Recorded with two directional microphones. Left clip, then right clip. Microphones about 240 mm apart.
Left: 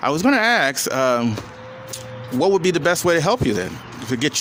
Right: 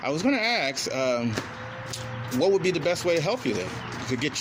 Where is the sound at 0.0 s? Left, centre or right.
Left.